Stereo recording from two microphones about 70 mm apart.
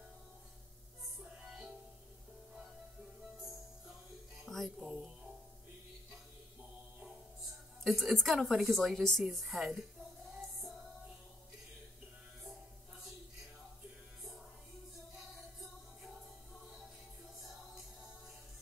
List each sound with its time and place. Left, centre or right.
4.5 s music: centre
7.8 s a woman's voice: centre